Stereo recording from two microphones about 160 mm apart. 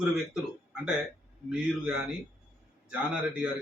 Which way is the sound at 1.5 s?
5° right (ahead or behind).